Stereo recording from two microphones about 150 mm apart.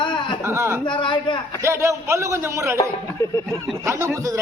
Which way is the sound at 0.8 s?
30° left (ahead or behind).